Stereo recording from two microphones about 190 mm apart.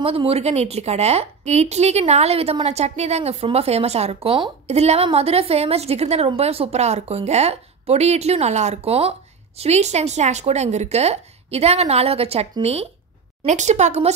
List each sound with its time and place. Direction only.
0.0 s a woman's voice: 30° right (ahead or behind)